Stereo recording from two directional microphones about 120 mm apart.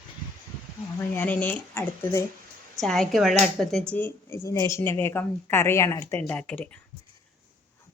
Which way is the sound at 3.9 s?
15° left (ahead or behind).